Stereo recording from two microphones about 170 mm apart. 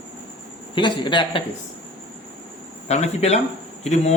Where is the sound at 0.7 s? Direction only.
25° left (ahead or behind).